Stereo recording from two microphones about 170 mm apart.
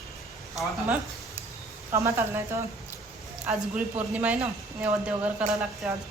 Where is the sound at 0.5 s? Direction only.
10° right (ahead or behind).